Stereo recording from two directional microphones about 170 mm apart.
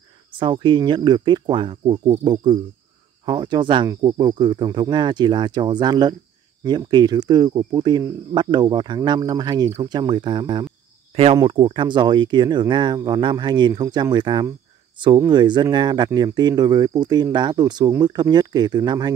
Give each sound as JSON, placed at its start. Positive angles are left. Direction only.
{"t": 0.3, "sound": "speech", "side_deg": -30}